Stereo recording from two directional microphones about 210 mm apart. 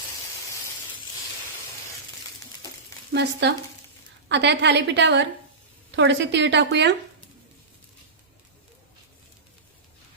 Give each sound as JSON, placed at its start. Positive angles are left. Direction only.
{"t": 3.1, "sound": "a woman's voice", "side_deg": -50}